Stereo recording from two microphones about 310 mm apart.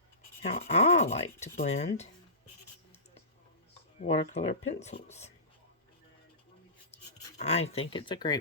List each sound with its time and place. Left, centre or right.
0.4 s rub: left
4.0 s rub: left
6.9 s speech: left